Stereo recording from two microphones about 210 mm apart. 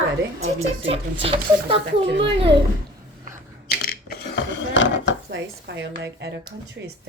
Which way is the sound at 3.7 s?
45° left (ahead or behind).